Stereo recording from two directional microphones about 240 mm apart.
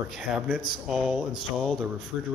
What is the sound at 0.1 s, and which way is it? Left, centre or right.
A man's voice, centre.